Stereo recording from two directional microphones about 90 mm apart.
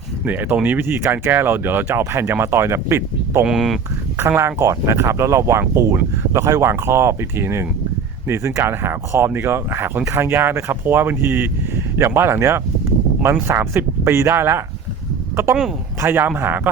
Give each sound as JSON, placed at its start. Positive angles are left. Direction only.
{"t": 0.3, "sound": "speech", "side_deg": -20}
{"t": 3.4, "sound": "speech", "side_deg": -5}
{"t": 4.2, "sound": "speech", "side_deg": -30}
{"t": 16.0, "sound": "speech", "side_deg": -25}